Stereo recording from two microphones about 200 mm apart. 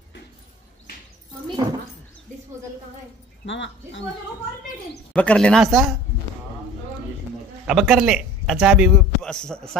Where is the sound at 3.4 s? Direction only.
65° left (ahead or behind).